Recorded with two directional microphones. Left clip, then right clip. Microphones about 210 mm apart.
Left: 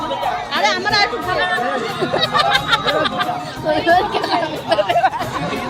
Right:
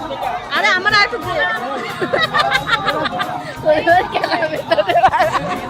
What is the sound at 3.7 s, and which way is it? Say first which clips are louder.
A woman's voice: right 2 dB; 15° right (ahead or behind).